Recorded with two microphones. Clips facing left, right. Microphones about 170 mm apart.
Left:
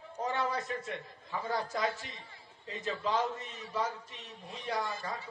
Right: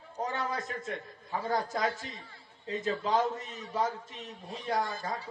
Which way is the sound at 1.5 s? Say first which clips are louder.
Right 2 dB; 45° right (ahead or behind).